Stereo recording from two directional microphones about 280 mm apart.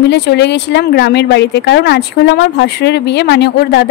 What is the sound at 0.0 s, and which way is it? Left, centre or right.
Speech, left.